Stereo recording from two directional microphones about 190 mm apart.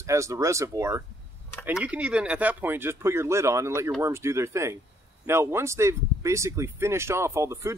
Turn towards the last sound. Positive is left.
turn(degrees=-15)  # may be behind; listen again after turning